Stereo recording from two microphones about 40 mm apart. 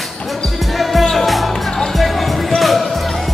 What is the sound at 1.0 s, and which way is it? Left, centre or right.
Music, centre.